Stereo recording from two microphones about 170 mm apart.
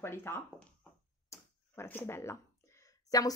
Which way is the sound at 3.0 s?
20° left (ahead or behind).